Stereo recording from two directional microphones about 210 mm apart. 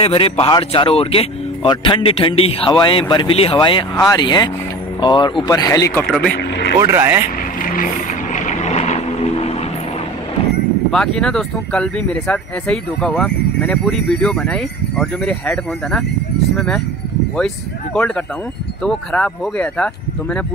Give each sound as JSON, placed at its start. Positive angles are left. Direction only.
{"t": 0.0, "sound": "speech", "side_deg": 25}
{"t": 6.3, "sound": "vehicle", "side_deg": 55}
{"t": 6.8, "sound": "speech", "side_deg": -15}
{"t": 7.6, "sound": "vehicle", "side_deg": 40}
{"t": 10.9, "sound": "speech", "side_deg": 5}
{"t": 17.9, "sound": "speech", "side_deg": 5}